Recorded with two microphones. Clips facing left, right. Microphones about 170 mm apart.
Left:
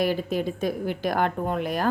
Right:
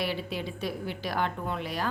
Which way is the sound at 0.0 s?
45° left (ahead or behind).